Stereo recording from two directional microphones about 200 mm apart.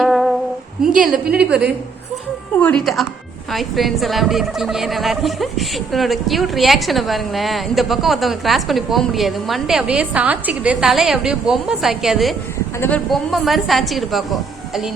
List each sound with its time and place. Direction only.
0.0 s music: centre (ahead or behind)
1.3 s speech: 5° right (ahead or behind)
2.6 s speech: 5° left (ahead or behind)